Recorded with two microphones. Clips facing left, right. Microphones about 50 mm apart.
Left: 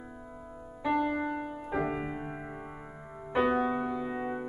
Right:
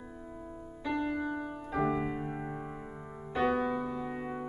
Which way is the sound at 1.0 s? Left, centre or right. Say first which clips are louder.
Left 2 dB; left.